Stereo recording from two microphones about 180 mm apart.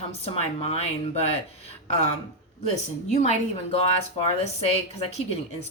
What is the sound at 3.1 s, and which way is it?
A woman's voice, 40° left (ahead or behind).